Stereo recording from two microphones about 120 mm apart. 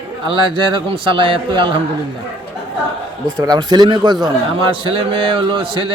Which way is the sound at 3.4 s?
35° right (ahead or behind).